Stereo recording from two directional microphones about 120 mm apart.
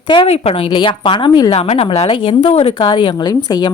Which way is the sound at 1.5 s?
55° left (ahead or behind).